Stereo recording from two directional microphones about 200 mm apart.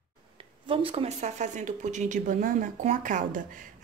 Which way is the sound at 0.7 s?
25° right (ahead or behind).